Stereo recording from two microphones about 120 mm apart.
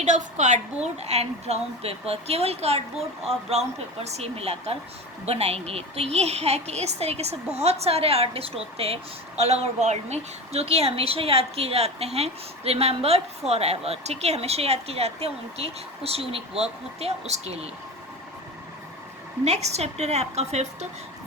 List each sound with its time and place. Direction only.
0.0 s a woman's voice: 85° right; by 8.9 s 55° right (ahead or behind)
9.4 s a woman's voice: 65° right (ahead or behind)
19.5 s a woman's voice: 65° right (ahead or behind)